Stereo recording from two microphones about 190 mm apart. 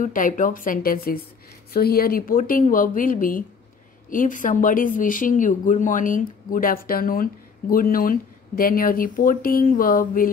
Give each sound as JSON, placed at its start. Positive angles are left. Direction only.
{"t": 0.0, "sound": "speech", "side_deg": 45}